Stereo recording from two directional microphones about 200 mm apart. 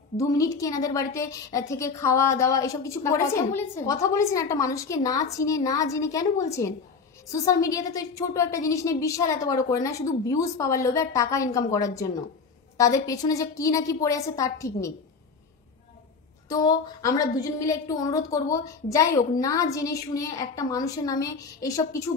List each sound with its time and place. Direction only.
0.2 s a woman's voice: 15° left (ahead or behind)
16.4 s a woman's voice: 15° left (ahead or behind)